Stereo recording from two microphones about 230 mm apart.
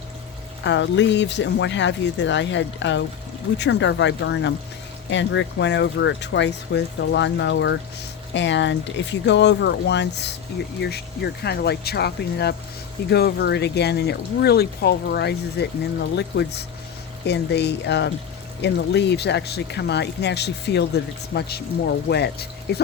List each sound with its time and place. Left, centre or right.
0.6 s speech: left